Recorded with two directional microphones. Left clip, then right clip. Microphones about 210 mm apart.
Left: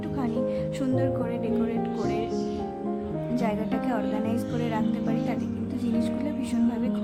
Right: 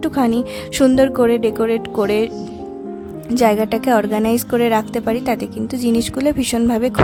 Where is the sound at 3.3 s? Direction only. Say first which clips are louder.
Right 15 dB; 50° right (ahead or behind).